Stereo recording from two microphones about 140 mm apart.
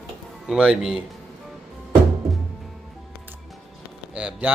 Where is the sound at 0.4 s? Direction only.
5° right (ahead or behind).